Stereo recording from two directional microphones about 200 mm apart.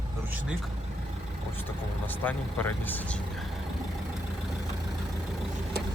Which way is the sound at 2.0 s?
10° left (ahead or behind).